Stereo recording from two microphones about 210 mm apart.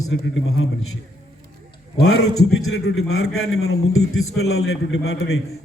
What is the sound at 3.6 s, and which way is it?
A man's voice, 80° left.